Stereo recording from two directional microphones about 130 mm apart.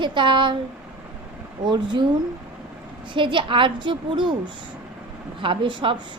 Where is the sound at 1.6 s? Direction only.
35° right (ahead or behind).